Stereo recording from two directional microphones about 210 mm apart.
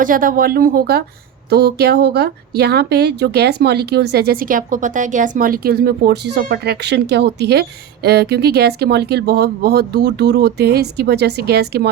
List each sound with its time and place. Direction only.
0.0 s speech: 40° right (ahead or behind)